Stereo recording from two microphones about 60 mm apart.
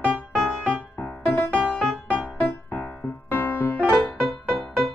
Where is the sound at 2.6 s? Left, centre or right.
Left.